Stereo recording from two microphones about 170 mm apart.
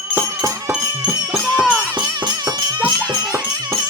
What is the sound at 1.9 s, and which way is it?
Music, 25° right (ahead or behind).